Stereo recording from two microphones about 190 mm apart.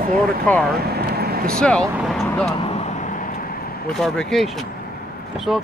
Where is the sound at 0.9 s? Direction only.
55° right (ahead or behind).